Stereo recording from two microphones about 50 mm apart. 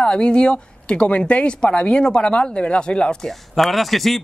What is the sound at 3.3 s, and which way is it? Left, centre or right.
Speech, centre.